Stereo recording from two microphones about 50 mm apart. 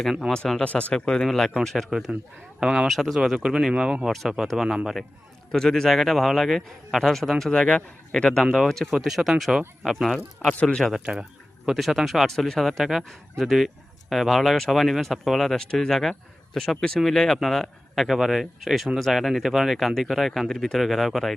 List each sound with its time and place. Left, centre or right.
0.0 s speech: centre
0.3 s a man's voice: centre
0.6 s speech: left
0.9 s a man's voice: centre
2.6 s speech: centre
2.8 s speech: centre
5.5 s a man's voice: centre
9.0 s speech: centre
10.8 s a man's voice: centre
11.0 s a sound: centre
11.7 s a man's voice: centre